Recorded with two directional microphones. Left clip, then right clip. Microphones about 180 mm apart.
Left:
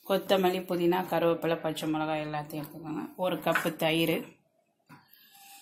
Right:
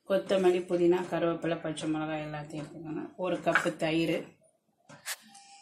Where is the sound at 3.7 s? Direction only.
55° left (ahead or behind).